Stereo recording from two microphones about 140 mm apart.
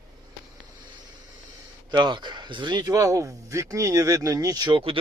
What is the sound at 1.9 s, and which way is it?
Speech, 30° right (ahead or behind).